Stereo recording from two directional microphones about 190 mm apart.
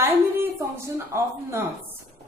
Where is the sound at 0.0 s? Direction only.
15° right (ahead or behind).